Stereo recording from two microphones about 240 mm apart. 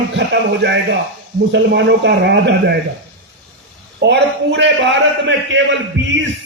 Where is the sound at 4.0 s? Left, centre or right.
Right.